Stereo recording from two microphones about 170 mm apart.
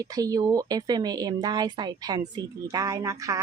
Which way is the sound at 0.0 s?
20° right (ahead or behind).